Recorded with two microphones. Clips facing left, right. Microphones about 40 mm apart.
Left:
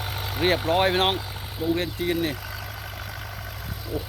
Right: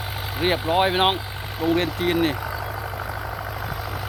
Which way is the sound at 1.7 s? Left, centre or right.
Right.